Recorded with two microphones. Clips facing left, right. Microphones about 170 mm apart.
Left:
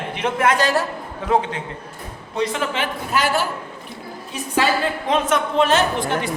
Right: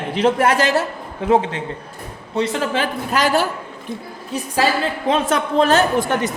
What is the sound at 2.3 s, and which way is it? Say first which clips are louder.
Speech: right 2 dB; 30° right (ahead or behind).